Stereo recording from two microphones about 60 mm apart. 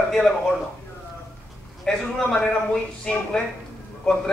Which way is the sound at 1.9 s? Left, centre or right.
Centre.